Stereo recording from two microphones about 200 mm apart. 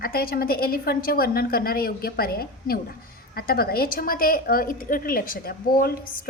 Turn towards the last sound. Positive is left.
turn(degrees=50)  # may be behind; listen again after turning